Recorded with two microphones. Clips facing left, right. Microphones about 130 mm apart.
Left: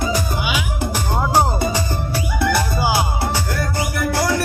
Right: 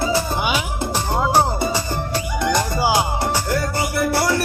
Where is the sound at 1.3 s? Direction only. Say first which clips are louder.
Left 1 dB; 15° left (ahead or behind).